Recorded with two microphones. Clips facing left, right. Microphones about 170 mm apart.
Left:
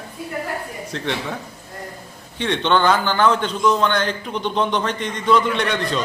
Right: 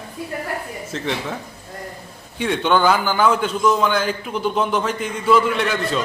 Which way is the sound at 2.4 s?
10° right (ahead or behind).